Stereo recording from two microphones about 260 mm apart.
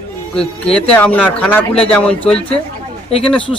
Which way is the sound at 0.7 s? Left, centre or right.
Centre.